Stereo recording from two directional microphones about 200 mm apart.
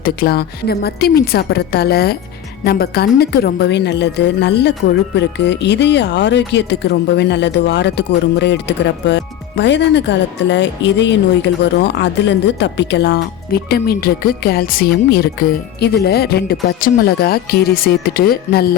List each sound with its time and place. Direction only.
0.0 s a woman's voice: 50° left (ahead or behind)